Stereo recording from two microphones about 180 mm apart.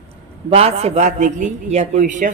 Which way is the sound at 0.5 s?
35° right (ahead or behind).